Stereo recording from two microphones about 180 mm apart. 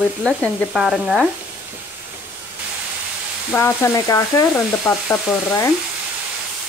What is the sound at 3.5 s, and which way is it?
Stir, 15° left (ahead or behind).